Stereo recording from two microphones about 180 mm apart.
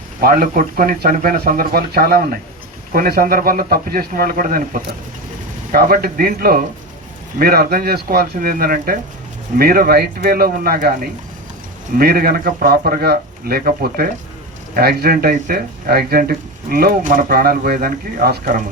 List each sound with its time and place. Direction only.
0.2 s speech: 55° right (ahead or behind)